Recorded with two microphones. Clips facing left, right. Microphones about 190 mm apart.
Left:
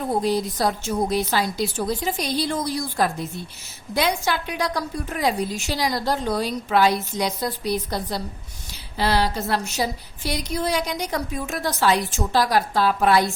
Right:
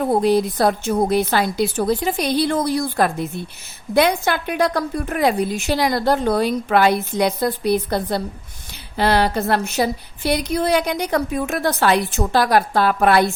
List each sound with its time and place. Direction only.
0.0 s a woman's voice: 60° right (ahead or behind)